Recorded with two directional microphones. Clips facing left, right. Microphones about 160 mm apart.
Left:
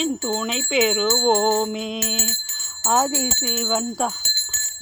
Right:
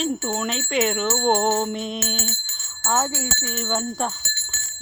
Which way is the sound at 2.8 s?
15° left (ahead or behind).